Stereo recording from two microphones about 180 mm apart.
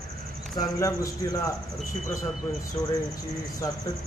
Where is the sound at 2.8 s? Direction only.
15° left (ahead or behind).